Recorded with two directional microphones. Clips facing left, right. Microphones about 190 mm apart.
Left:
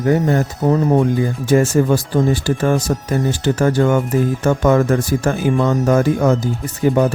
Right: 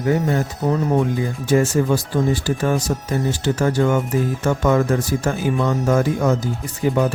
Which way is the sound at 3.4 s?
55° left (ahead or behind).